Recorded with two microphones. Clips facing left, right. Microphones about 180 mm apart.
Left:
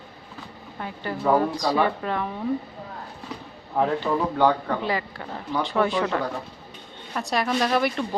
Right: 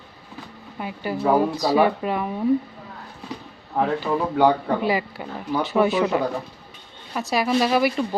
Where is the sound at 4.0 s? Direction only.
15° right (ahead or behind).